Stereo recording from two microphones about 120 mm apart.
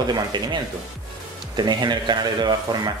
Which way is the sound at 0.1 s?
35° right (ahead or behind).